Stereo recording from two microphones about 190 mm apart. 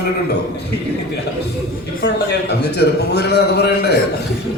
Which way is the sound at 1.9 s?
60° left (ahead or behind).